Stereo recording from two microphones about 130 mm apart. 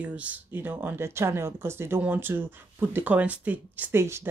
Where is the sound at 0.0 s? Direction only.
10° right (ahead or behind).